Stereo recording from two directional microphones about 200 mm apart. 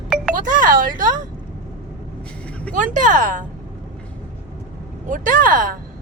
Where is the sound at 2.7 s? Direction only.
40° right (ahead or behind).